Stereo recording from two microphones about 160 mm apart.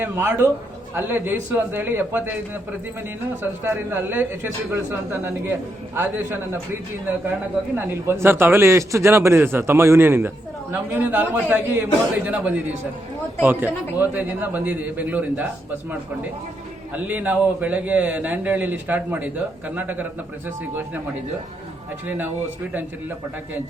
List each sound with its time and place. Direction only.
0.0 s a man's voice: 15° right (ahead or behind)
3.4 s a man's voice: 15° right (ahead or behind)
7.8 s a man's voice: 15° right (ahead or behind)
16.9 s a man's voice: 10° right (ahead or behind)